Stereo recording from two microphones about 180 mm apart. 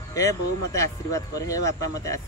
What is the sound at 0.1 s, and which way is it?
Speech, 20° left (ahead or behind).